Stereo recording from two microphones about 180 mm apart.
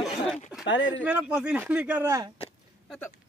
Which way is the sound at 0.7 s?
90° left.